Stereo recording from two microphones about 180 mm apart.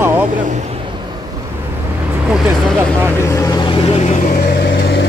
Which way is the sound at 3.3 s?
25° left (ahead or behind).